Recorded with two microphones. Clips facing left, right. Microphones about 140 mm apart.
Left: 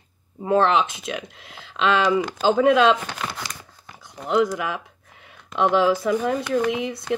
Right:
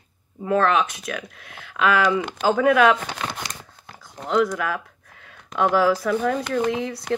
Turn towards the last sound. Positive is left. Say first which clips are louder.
# left 1 dB
turn(degrees=15)  # may be behind; listen again after turning